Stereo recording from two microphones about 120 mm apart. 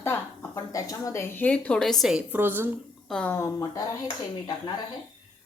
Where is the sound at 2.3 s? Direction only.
15° right (ahead or behind).